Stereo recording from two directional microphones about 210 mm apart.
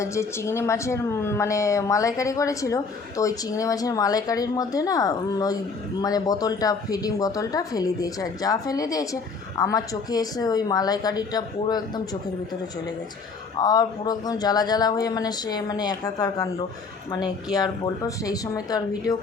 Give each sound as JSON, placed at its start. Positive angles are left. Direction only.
{"t": 0.0, "sound": "a woman's voice", "side_deg": 15}
{"t": 13.6, "sound": "a woman's voice", "side_deg": 20}